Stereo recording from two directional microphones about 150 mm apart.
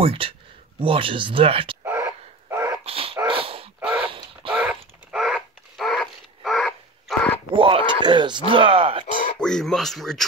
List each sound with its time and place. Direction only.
0.0 s speech: 40° right (ahead or behind)
1.9 s dog: 15° right (ahead or behind)
2.8 s dog: 40° right (ahead or behind)
4.0 s a sound: 35° right (ahead or behind)
4.6 s dog: centre (ahead or behind)
7.5 s speech: 35° right (ahead or behind)
9.4 s speech: 5° left (ahead or behind)